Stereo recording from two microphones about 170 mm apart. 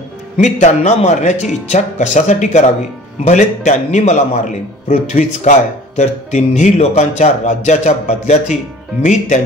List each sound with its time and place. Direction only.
0.4 s speech: 45° left (ahead or behind)